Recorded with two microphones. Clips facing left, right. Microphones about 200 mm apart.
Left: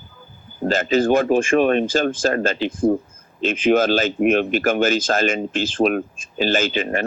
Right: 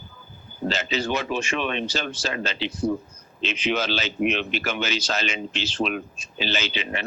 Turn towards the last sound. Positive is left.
turn(degrees=50)  # may be behind; listen again after turning